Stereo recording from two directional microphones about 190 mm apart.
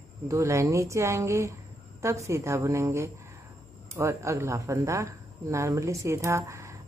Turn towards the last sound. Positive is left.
turn(degrees=-15)  # may be behind; listen again after turning